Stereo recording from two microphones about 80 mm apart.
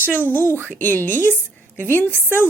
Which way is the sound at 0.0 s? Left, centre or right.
Left.